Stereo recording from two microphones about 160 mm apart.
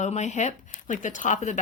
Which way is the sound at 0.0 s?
45° left (ahead or behind).